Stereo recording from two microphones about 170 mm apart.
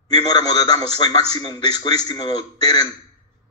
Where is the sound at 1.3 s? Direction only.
25° left (ahead or behind).